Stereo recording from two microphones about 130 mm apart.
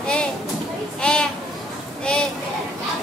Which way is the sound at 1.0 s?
5° left (ahead or behind).